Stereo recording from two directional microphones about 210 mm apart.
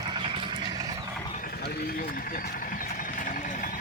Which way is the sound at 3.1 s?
40° left (ahead or behind).